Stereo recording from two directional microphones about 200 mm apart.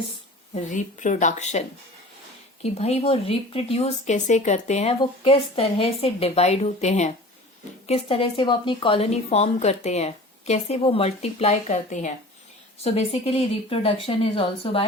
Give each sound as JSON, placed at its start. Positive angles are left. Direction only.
{"t": 0.5, "sound": "a woman's voice", "side_deg": 40}
{"t": 2.7, "sound": "a woman's voice", "side_deg": 30}